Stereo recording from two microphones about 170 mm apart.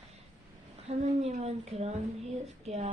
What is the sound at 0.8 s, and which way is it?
A woman's voice, 40° right (ahead or behind).